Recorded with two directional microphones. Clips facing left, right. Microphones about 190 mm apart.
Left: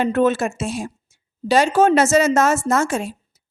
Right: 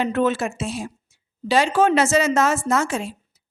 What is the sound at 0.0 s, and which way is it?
Speech, 45° left (ahead or behind).